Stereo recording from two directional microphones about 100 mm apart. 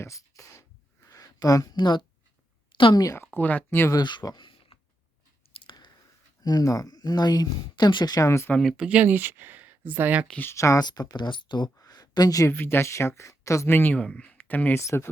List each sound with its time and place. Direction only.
0.0 s a sound: 30° left (ahead or behind)
1.7 s a woman's voice: 45° left (ahead or behind)
3.3 s speech: 15° left (ahead or behind)
3.9 s speech: 45° left (ahead or behind)
5.5 s clicking: 50° left (ahead or behind)
6.4 s speech: 40° left (ahead or behind)
8.4 s speech: 10° left (ahead or behind)
8.7 s speech: 10° right (ahead or behind)
10.4 s speech: 30° left (ahead or behind)
10.8 s speech: 45° left (ahead or behind)
12.5 s speech: 25° left (ahead or behind)